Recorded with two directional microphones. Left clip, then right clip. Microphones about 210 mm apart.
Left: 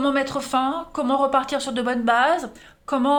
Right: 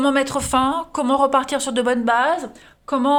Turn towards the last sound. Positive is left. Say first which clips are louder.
# right 2 dB
turn(degrees=-15)  # may be behind; listen again after turning